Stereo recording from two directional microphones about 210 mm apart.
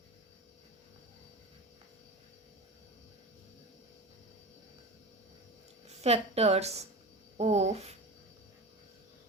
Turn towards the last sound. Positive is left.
turn(degrees=-30)  # may be behind; listen again after turning